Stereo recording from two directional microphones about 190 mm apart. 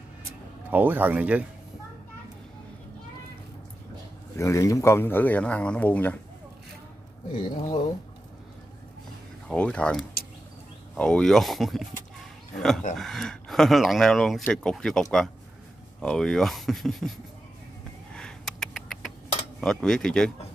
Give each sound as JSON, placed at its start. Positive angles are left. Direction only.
{"t": 0.7, "sound": "speech", "side_deg": -10}
{"t": 4.4, "sound": "speech", "side_deg": 15}
{"t": 7.3, "sound": "speech", "side_deg": 25}
{"t": 9.5, "sound": "speech", "side_deg": 5}
{"t": 18.1, "sound": "rodents", "side_deg": 5}
{"t": 19.6, "sound": "speech", "side_deg": 5}